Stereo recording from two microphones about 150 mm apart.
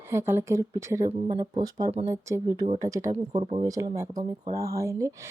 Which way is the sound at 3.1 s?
45° right (ahead or behind).